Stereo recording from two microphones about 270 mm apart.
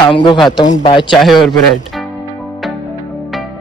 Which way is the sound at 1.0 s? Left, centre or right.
Centre.